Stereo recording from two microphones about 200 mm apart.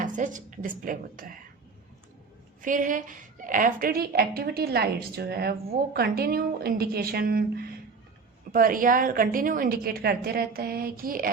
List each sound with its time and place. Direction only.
0.0 s a woman's voice: 40° right (ahead or behind)
2.6 s a woman's voice: 40° right (ahead or behind)